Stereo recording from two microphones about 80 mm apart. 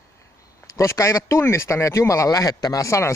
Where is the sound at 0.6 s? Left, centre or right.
Left.